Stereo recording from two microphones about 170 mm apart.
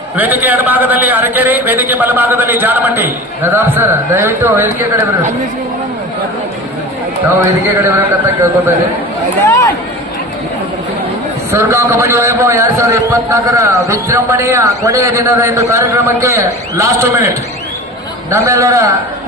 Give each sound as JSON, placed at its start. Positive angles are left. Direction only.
{"t": 0.2, "sound": "a man's voice", "side_deg": -10}
{"t": 7.4, "sound": "a man's voice", "side_deg": -15}
{"t": 11.5, "sound": "a man's voice", "side_deg": -15}